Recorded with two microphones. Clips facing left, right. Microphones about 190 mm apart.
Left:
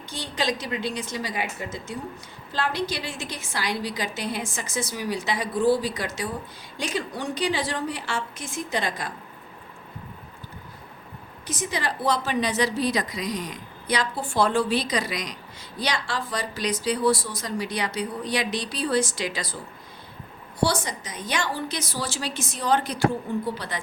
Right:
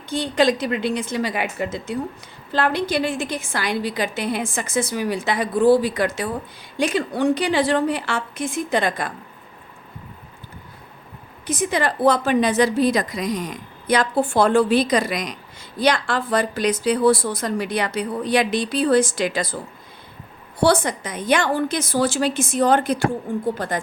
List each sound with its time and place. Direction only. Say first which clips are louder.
0.1 s a woman's voice: right 9 dB; 55° right (ahead or behind)
11.4 s a woman's voice: right 7 dB; 55° right (ahead or behind)
20.6 s a woman's voice: right 7 dB; 55° right (ahead or behind)